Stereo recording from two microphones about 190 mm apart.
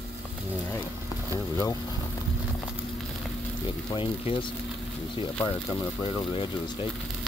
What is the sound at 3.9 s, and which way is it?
Speech, 25° left (ahead or behind).